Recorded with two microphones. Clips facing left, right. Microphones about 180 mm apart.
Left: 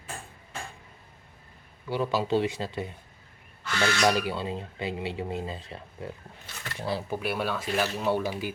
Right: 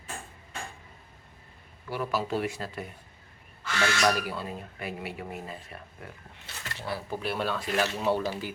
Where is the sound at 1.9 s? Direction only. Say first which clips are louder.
Left 4 dB; 20° left (ahead or behind).